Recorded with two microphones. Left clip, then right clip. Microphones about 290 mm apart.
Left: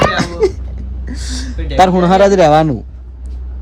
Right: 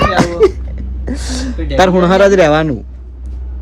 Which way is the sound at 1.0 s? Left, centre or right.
Right.